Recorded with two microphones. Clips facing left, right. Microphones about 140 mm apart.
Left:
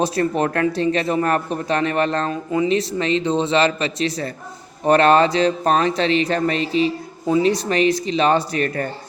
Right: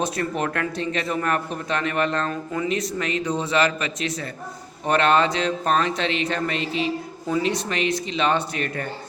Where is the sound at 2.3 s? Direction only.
20° left (ahead or behind).